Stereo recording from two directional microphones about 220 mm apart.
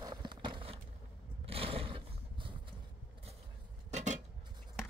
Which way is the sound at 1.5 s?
25° right (ahead or behind).